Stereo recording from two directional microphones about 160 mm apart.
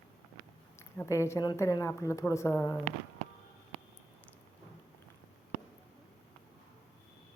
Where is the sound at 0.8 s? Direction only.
15° left (ahead or behind).